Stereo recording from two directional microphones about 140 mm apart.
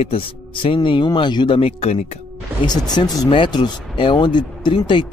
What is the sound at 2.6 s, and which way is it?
A man's voice, 30° left (ahead or behind).